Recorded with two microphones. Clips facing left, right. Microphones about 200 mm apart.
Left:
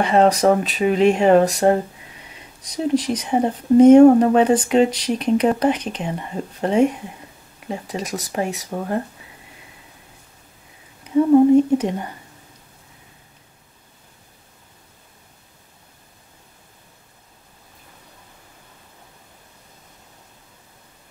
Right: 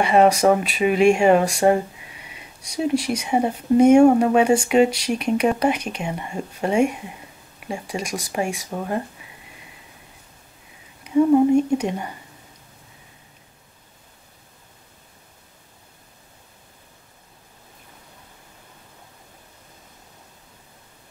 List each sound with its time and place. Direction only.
0.0 s speech: 10° right (ahead or behind)
11.1 s a woman's voice: 10° right (ahead or behind)